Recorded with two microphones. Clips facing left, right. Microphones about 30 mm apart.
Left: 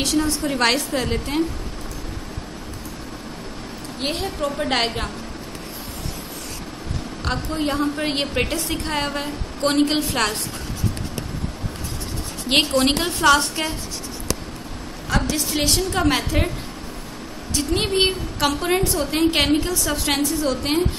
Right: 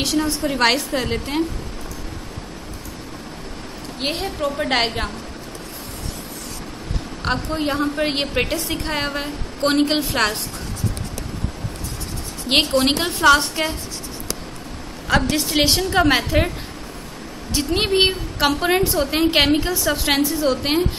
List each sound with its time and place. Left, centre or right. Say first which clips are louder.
0.0 s a woman's voice: even; centre
4.0 s a woman's voice: right 1 dB; centre
7.2 s a woman's voice: right 2 dB; centre
12.4 s a woman's voice: right 1 dB; centre
15.0 s a woman's voice: right 4 dB; right; by 16.5 s centre
17.6 s a woman's voice: right 2 dB; centre